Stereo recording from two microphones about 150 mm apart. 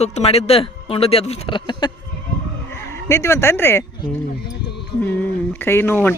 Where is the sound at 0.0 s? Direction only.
45° left (ahead or behind).